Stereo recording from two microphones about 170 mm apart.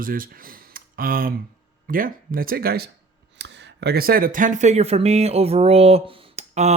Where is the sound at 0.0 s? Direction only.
55° right (ahead or behind).